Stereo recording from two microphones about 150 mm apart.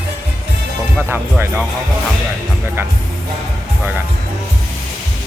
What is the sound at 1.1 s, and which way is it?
Speech, 15° right (ahead or behind).